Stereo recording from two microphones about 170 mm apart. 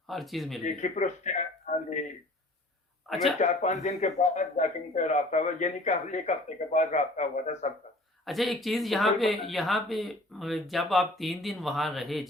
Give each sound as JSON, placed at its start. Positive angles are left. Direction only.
{"t": 0.1, "sound": "speech", "side_deg": 0}
{"t": 0.6, "sound": "a man's voice", "side_deg": 45}
{"t": 3.1, "sound": "speech", "side_deg": 0}
{"t": 3.3, "sound": "a man's voice", "side_deg": 40}
{"t": 8.2, "sound": "speech", "side_deg": 0}